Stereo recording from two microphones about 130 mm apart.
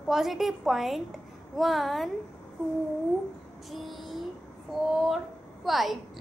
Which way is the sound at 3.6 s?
Centre (ahead or behind).